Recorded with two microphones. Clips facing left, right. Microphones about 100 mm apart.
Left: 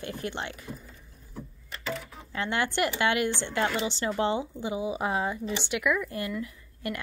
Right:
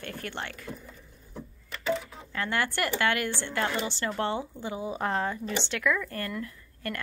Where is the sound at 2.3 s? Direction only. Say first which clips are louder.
Left 1 dB; 20° left (ahead or behind).